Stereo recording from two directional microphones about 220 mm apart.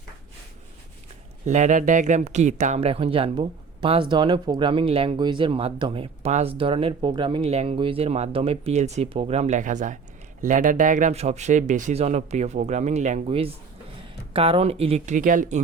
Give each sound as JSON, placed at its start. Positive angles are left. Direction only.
{"t": 1.5, "sound": "speech", "side_deg": -35}